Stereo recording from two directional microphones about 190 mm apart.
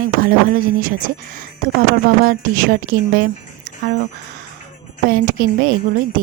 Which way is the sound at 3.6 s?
50° right (ahead or behind).